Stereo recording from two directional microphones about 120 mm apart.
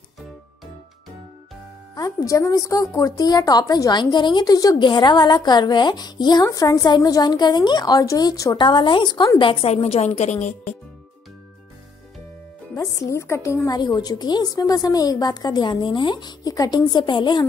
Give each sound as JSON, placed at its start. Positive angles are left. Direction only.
{"t": 2.0, "sound": "a woman's voice", "side_deg": 30}
{"t": 8.5, "sound": "a woman's voice", "side_deg": 45}
{"t": 10.4, "sound": "speech", "side_deg": 75}
{"t": 12.7, "sound": "a woman's voice", "side_deg": 25}
{"t": 13.7, "sound": "a woman's voice", "side_deg": 35}